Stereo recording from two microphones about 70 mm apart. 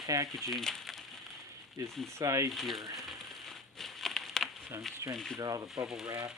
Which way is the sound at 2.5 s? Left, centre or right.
Centre.